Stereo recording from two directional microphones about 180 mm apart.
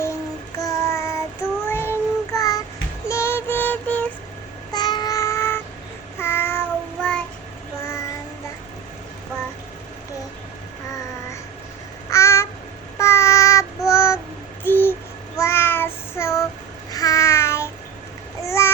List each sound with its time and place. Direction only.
0.6 s child singing: 15° left (ahead or behind)
3.1 s music: 15° left (ahead or behind)
4.7 s a sound: 25° left (ahead or behind)
6.1 s child singing: 10° left (ahead or behind)
12.1 s a sound: 15° left (ahead or behind)
13.0 s child singing: 15° left (ahead or behind)
14.6 s a sound: 10° left (ahead or behind)
15.4 s child singing: 15° left (ahead or behind)
16.9 s babbling: 20° left (ahead or behind)
18.4 s child singing: 15° left (ahead or behind)